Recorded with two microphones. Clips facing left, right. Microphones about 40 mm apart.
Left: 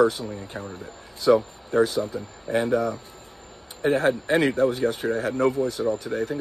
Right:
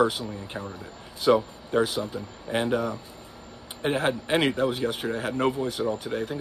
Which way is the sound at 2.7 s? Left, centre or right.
Right.